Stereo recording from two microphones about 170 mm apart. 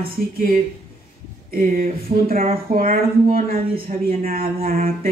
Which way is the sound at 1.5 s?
55° right (ahead or behind).